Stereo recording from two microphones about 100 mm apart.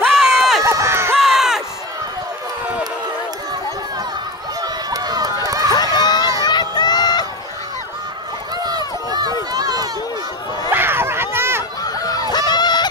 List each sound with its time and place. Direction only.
0.1 s run: centre (ahead or behind)
0.7 s run: 25° right (ahead or behind)
1.1 s crowd: 5° right (ahead or behind)
4.6 s run: 40° right (ahead or behind)
5.9 s run: 45° left (ahead or behind)
6.4 s a sound: 45° left (ahead or behind)
8.5 s run: 40° right (ahead or behind)
10.7 s a sound: 20° right (ahead or behind)
11.8 s honk: 40° left (ahead or behind)